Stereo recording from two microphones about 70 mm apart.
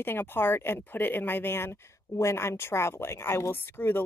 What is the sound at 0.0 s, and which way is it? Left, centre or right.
Speech, left.